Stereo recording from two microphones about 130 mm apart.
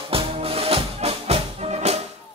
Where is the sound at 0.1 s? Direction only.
45° right (ahead or behind).